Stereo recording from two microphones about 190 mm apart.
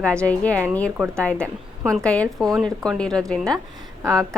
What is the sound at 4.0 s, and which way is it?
Speech, 15° right (ahead or behind).